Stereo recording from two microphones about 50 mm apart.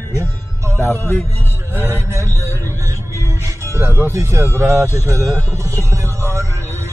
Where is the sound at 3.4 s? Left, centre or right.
Right.